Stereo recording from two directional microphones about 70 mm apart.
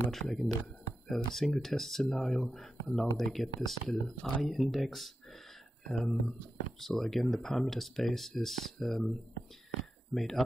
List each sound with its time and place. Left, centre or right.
0.1 s speech: centre
10.1 s speech: centre